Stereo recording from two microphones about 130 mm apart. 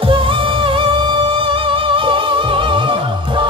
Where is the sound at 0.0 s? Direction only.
45° right (ahead or behind).